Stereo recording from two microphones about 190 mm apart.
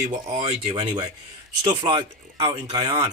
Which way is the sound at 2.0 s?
35° right (ahead or behind).